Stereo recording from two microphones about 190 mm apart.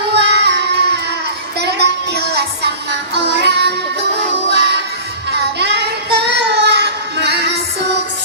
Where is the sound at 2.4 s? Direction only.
60° right (ahead or behind).